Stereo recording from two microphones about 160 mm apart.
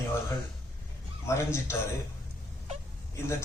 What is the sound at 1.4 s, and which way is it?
Speech, 15° left (ahead or behind).